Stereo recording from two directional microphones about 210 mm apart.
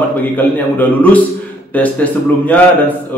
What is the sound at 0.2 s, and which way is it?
A man's voice, 10° left (ahead or behind).